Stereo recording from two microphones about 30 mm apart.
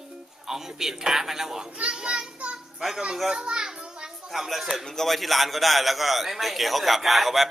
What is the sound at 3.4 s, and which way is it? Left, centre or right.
Children playing, right.